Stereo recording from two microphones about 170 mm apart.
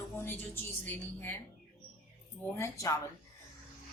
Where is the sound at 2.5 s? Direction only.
15° left (ahead or behind).